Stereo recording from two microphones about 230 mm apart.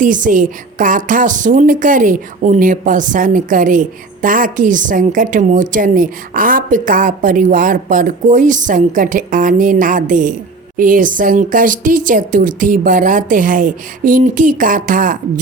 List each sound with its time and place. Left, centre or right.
0.0 s a woman's voice: right